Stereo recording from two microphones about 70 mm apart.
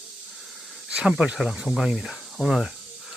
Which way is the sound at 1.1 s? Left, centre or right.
Centre.